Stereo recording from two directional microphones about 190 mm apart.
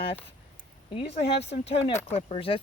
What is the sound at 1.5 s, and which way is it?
Speech, 35° left (ahead or behind).